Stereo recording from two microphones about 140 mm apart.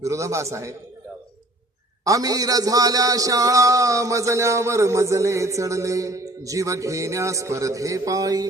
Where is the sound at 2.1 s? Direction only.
25° right (ahead or behind).